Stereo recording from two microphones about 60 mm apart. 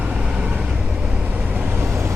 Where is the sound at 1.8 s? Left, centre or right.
Right.